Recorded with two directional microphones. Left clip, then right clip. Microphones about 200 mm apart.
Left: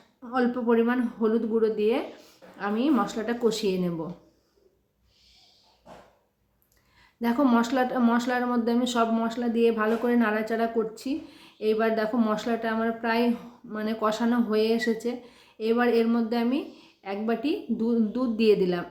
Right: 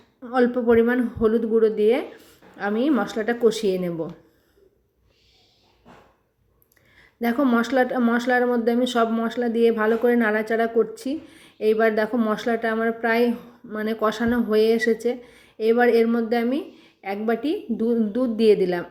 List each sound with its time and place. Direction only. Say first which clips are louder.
0.2 s speech: right 6 dB; 15° right (ahead or behind)
7.2 s speech: right 2 dB; 15° right (ahead or behind)